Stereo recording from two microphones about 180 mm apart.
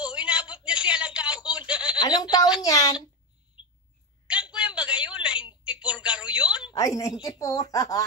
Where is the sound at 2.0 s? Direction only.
20° left (ahead or behind).